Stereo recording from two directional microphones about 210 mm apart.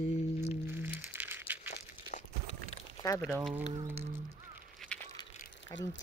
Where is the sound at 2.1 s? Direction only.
35° left (ahead or behind).